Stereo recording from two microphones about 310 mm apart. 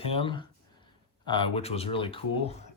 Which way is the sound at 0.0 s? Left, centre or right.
Centre.